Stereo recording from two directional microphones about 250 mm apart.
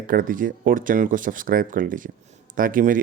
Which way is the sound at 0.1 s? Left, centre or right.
Right.